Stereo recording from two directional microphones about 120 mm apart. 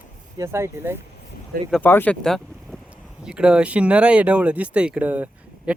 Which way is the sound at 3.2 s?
10° right (ahead or behind).